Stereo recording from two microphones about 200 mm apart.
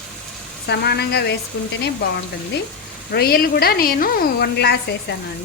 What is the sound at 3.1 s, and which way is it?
A woman's voice, 50° left (ahead or behind).